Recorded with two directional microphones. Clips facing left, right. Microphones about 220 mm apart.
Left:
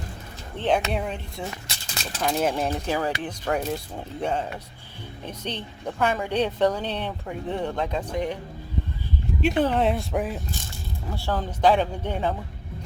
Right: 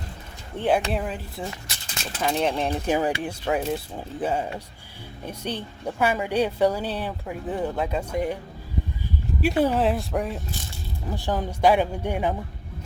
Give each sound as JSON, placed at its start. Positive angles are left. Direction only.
{"t": 0.5, "sound": "a woman's voice", "side_deg": -10}
{"t": 2.8, "sound": "a woman's voice", "side_deg": -15}
{"t": 9.4, "sound": "speech", "side_deg": -5}
{"t": 11.1, "sound": "a woman's voice", "side_deg": -15}